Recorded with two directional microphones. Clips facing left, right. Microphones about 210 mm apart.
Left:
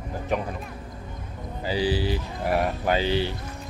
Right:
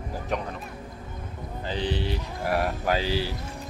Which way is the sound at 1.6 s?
5° left (ahead or behind).